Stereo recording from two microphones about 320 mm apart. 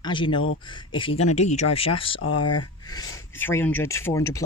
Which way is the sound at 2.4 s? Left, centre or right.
Left.